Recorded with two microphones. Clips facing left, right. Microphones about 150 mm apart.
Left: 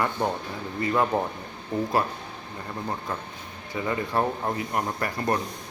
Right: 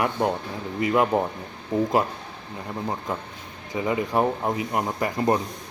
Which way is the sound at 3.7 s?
15° right (ahead or behind).